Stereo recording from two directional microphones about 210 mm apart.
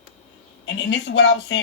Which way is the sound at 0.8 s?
60° left (ahead or behind).